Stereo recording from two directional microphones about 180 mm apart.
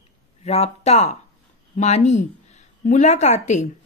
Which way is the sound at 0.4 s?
35° left (ahead or behind).